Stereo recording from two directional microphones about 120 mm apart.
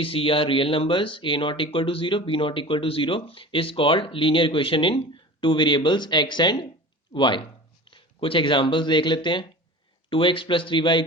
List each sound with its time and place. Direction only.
0.0 s speech: 50° left (ahead or behind)